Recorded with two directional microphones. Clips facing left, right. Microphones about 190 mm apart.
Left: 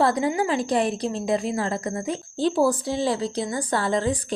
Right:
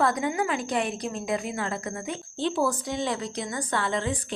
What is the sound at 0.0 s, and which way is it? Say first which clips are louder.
A woman's voice: left 4 dB; 30° left (ahead or behind).